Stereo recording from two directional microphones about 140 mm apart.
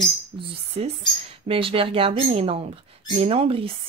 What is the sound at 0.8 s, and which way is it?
Speech, 45° right (ahead or behind).